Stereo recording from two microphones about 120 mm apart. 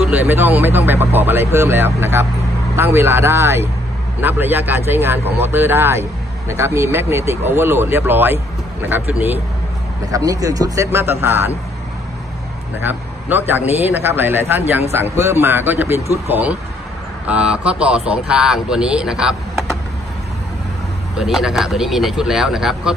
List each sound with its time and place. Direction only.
0.3 s speech: 15° right (ahead or behind)
10.1 s speech: 30° right (ahead or behind)
12.8 s speech: 15° right (ahead or behind)
17.3 s speech: 10° right (ahead or behind)
21.2 s speech: 5° right (ahead or behind)